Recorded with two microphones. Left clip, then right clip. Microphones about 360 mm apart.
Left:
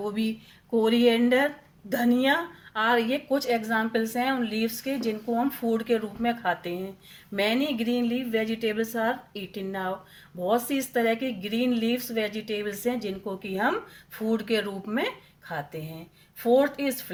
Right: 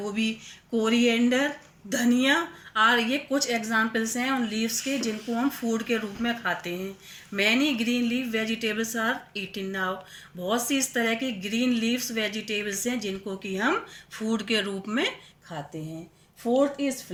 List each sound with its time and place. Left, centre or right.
0.1 s speech: left